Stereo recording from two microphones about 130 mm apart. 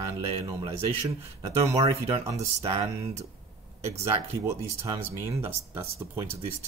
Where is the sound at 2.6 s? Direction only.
55° right (ahead or behind).